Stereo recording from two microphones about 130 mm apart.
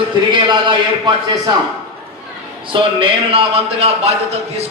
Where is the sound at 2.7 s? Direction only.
40° right (ahead or behind).